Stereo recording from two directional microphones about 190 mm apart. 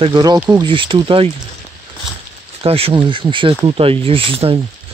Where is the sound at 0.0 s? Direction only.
20° right (ahead or behind).